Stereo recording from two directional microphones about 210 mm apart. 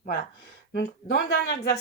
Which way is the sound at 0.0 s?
45° left (ahead or behind).